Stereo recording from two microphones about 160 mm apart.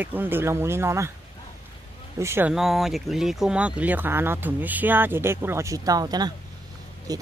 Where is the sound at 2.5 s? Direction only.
Centre (ahead or behind).